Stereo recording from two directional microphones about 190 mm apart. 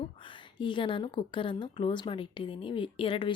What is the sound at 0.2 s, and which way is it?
A woman's voice, 25° left (ahead or behind).